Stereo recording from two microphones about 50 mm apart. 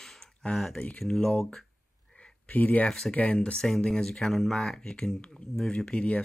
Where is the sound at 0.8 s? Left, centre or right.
Left.